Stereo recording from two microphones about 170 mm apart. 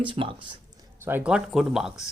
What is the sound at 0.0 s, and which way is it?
Speech, 30° right (ahead or behind).